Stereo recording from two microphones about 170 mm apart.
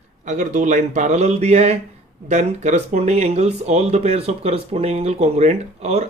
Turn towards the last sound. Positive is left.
turn(degrees=-40)  # may be behind; listen again after turning